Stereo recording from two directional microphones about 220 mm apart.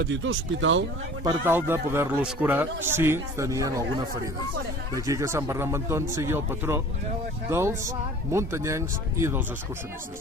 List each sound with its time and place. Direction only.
0.0 s speech: 55° right (ahead or behind)
1.2 s speech: 15° right (ahead or behind)
4.9 s speech: 15° right (ahead or behind)